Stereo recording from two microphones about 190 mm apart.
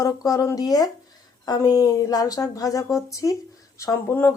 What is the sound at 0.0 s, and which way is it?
A woman's voice, 20° left (ahead or behind).